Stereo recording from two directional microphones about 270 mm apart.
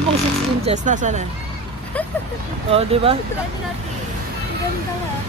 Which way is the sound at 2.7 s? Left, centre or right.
Right.